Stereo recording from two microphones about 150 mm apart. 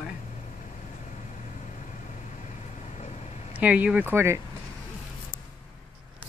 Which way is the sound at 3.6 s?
10° right (ahead or behind).